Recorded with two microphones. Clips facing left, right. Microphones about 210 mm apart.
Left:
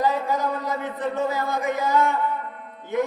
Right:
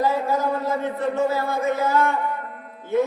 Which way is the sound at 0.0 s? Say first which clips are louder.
Right 2 dB; 15° left (ahead or behind).